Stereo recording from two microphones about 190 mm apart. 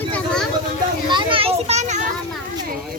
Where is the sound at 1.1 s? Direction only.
30° right (ahead or behind).